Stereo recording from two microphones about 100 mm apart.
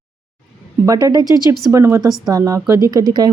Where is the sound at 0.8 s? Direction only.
35° right (ahead or behind).